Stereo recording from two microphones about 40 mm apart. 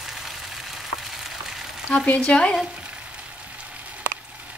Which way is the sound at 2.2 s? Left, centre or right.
Left.